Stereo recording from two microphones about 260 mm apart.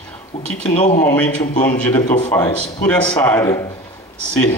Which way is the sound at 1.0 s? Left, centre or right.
Centre.